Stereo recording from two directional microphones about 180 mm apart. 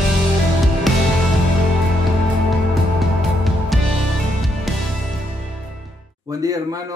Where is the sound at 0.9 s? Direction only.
Centre (ahead or behind).